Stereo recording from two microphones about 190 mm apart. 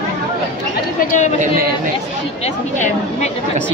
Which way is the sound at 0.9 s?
40° left (ahead or behind).